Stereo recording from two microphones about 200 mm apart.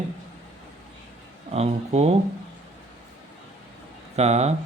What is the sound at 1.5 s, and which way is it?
Speech, 30° right (ahead or behind).